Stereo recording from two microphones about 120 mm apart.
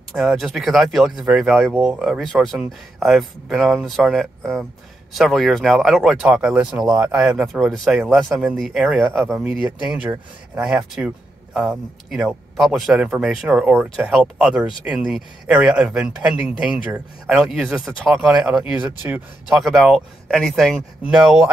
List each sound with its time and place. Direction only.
0.1 s speech: centre (ahead or behind)
6.2 s speech: 10° right (ahead or behind)
9.8 s a man's voice: 10° right (ahead or behind)
19.5 s speech: centre (ahead or behind)